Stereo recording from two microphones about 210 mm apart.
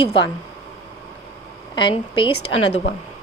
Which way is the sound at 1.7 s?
25° left (ahead or behind).